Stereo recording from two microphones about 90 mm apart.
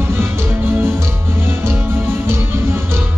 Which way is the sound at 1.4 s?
25° right (ahead or behind).